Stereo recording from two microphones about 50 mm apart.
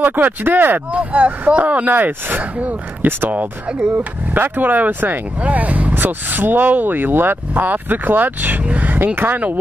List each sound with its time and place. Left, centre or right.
0.0 s speech: right
0.9 s speech: right
3.6 s speech: right
4.3 s speech: right